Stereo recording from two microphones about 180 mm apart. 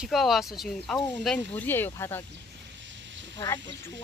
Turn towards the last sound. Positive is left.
turn(degrees=15)  # may be behind; listen again after turning